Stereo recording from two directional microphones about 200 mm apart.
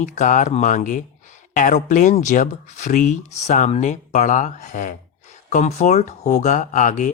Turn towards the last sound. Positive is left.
turn(degrees=40)  # may be behind; listen again after turning